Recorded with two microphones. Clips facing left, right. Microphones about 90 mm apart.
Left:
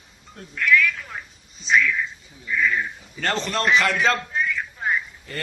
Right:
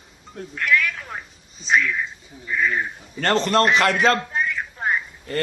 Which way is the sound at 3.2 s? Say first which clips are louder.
Right 5 dB; 55° right (ahead or behind).